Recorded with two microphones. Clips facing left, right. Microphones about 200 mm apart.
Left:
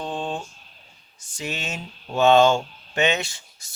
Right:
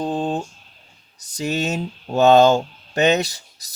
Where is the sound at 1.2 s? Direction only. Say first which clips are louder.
Right 9 dB; 40° right (ahead or behind).